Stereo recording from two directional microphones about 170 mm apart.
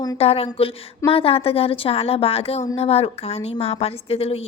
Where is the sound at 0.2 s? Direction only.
35° left (ahead or behind).